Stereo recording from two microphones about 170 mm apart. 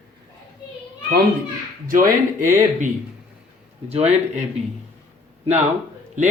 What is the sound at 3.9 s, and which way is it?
Speech, 40° right (ahead or behind).